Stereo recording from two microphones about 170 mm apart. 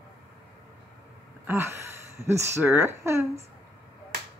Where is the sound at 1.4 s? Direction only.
15° right (ahead or behind).